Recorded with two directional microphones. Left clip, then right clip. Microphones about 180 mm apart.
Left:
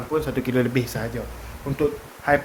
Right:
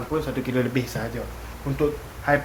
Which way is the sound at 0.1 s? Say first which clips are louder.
Left 3 dB; 45° left (ahead or behind).